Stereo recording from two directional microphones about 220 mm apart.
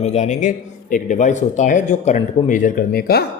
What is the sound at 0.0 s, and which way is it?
Speech, 30° left (ahead or behind).